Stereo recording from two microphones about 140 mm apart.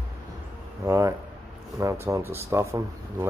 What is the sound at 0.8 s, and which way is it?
Speech, 20° right (ahead or behind).